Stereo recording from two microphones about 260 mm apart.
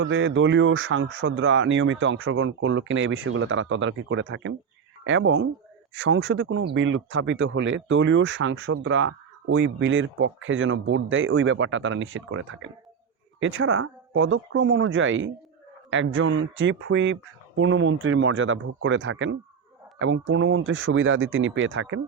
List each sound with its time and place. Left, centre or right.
0.0 s speech: right